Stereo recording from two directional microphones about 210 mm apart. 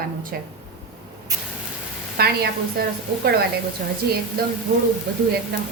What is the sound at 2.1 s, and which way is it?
Speech, 45° right (ahead or behind).